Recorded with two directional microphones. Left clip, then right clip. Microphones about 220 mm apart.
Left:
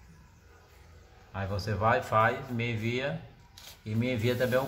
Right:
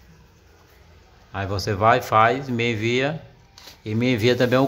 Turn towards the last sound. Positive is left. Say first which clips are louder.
# right 9 dB
turn(degrees=-45)  # may be behind; listen again after turning